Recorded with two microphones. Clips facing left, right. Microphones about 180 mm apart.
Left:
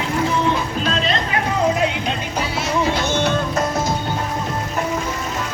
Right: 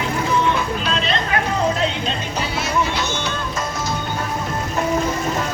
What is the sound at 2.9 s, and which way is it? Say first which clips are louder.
Music: left 5 dB; 55° left (ahead or behind).